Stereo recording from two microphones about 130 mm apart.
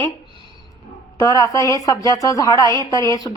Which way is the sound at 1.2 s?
25° left (ahead or behind).